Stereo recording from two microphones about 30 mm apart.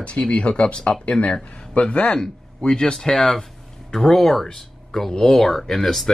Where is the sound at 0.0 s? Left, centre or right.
Left.